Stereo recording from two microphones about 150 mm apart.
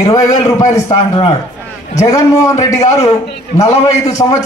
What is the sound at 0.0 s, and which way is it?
A man's voice, 20° left (ahead or behind).